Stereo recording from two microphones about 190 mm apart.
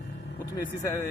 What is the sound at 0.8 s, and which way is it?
Speech, 15° left (ahead or behind).